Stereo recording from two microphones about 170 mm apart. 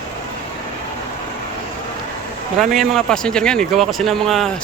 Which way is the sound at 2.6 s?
Centre (ahead or behind).